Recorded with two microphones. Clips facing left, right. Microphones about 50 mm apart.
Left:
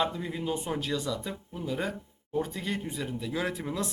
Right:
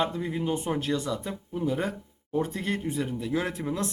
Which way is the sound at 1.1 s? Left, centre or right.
Right.